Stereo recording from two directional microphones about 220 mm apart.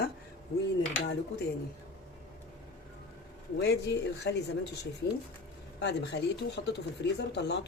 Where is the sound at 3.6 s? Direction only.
50° left (ahead or behind).